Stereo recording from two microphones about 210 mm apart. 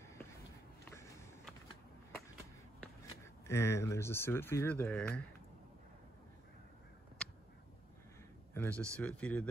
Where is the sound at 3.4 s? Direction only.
10° left (ahead or behind).